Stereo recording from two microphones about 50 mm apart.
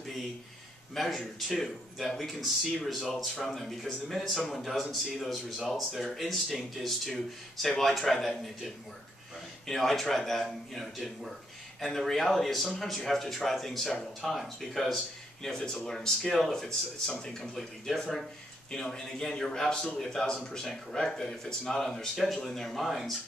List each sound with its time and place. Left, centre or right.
0.9 s a man's voice: centre
5.3 s speech: centre
9.7 s speech: centre